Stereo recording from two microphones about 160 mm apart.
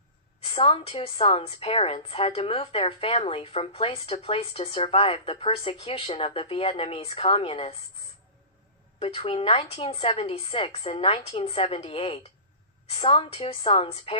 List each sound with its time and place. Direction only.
0.4 s a woman's voice: 35° left (ahead or behind)
9.0 s a woman's voice: 35° left (ahead or behind)